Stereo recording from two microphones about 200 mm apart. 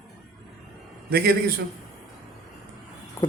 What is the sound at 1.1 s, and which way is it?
Speech, 50° right (ahead or behind).